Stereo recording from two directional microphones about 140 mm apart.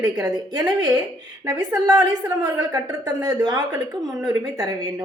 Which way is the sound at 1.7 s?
25° right (ahead or behind).